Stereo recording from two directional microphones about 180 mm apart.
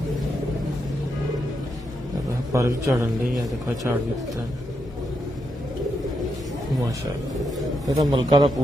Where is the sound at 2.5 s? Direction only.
15° right (ahead or behind).